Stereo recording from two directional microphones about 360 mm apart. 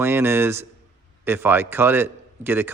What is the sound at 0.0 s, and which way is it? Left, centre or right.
A man's voice, centre.